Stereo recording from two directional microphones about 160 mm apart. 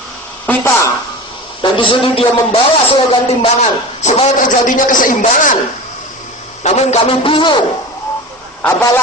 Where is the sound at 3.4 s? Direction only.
45° left (ahead or behind).